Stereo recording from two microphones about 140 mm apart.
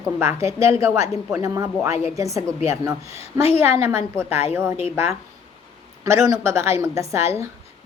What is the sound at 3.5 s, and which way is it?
A woman's voice, 20° right (ahead or behind).